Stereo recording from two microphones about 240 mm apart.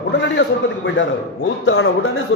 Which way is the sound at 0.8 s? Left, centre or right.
Left.